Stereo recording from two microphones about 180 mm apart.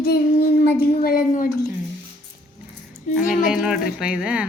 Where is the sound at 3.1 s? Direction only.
45° left (ahead or behind).